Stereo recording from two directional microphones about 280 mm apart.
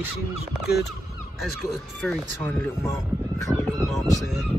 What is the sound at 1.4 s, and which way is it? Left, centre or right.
Speech, centre.